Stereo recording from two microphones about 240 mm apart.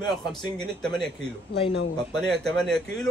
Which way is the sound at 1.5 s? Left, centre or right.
Left.